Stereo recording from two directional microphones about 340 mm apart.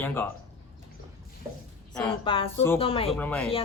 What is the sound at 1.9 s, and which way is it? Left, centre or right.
Speech, centre.